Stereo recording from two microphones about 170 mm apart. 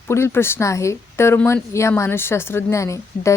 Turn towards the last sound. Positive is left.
turn(degrees=15)  # may be behind; listen again after turning